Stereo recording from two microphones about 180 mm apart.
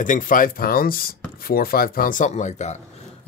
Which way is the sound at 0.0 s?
50° left (ahead or behind).